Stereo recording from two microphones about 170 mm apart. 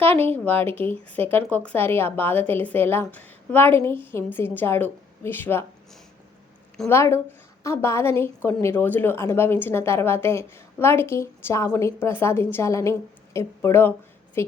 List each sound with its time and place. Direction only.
0.0 s a woman's voice: 10° left (ahead or behind)
6.8 s a woman's voice: 15° left (ahead or behind)